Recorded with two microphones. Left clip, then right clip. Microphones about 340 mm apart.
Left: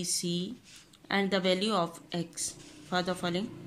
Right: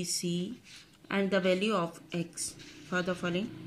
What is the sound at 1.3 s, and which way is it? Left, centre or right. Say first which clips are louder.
Speech: right 1 dB; centre.